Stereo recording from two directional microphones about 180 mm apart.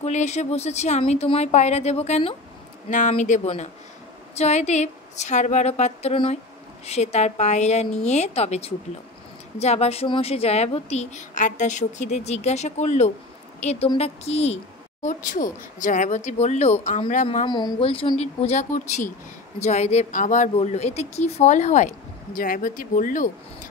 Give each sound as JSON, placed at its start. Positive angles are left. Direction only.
{"t": 0.0, "sound": "a woman's voice", "side_deg": 40}
{"t": 17.5, "sound": "speech", "side_deg": 25}